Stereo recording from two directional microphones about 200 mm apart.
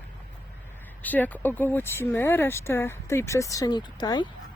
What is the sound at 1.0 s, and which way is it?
Speech, 10° left (ahead or behind).